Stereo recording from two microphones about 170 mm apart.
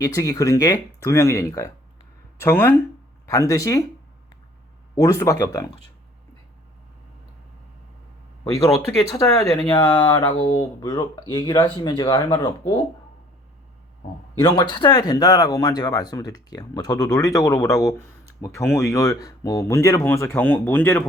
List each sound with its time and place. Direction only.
0.0 s speech: 20° left (ahead or behind)
5.0 s speech: 20° left (ahead or behind)
8.5 s speech: 20° left (ahead or behind)
14.3 s speech: 25° left (ahead or behind)